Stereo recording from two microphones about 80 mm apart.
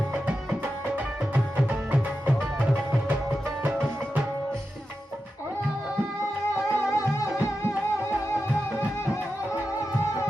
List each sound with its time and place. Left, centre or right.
1.5 s tabla: centre
6.5 s music: left